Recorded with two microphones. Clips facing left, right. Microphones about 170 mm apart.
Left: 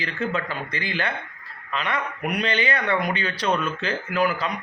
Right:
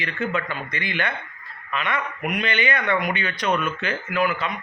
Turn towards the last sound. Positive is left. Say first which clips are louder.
# even
turn(degrees=35)  # may be behind; listen again after turning